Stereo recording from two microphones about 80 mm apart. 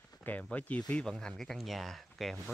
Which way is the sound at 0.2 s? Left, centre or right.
Left.